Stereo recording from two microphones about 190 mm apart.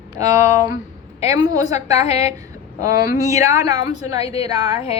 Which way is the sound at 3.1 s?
40° left (ahead or behind).